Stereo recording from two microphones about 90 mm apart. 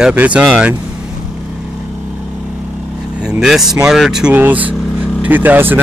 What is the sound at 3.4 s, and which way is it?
Speech, 5° right (ahead or behind).